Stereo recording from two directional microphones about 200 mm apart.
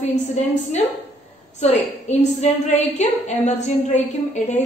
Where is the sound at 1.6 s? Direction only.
35° left (ahead or behind).